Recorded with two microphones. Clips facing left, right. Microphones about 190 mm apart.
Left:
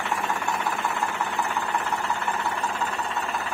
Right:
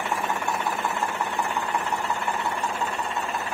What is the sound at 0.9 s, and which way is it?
Engine, 15° right (ahead or behind).